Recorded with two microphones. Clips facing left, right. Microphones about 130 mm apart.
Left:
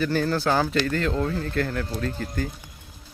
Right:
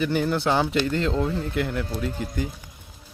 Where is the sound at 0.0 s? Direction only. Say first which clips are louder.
Even; 15° right (ahead or behind).